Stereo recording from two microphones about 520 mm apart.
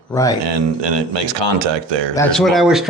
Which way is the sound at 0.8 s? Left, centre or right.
Right.